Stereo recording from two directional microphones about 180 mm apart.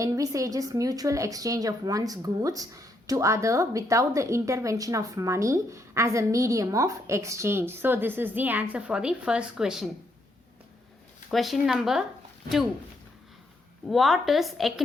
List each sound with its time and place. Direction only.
0.0 s a woman's voice: 20° right (ahead or behind); by 9.9 s centre (ahead or behind)
11.3 s a woman's voice: centre (ahead or behind)
13.9 s a woman's voice: centre (ahead or behind)